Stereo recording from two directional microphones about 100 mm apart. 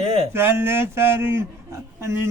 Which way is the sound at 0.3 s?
25° right (ahead or behind).